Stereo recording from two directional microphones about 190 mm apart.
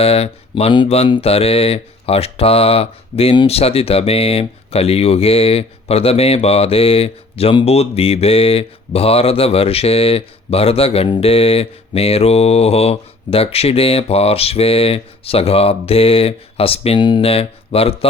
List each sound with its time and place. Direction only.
0.0 s mantra: 30° left (ahead or behind)